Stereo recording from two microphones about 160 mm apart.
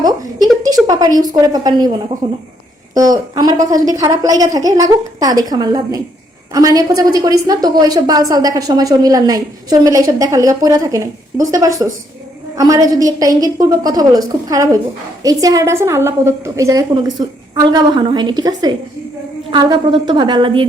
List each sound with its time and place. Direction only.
0.9 s a woman's voice: 25° right (ahead or behind)
2.9 s a woman's voice: 25° right (ahead or behind)